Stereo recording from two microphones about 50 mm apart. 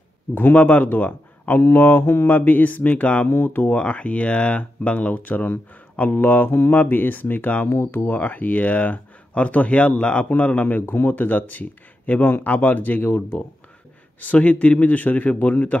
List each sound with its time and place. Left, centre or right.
0.3 s speech: left
1.6 s mantra: left
2.3 s speech: left
3.3 s speech: left
7.7 s speech: left
8.1 s speech: left
14.2 s speech: left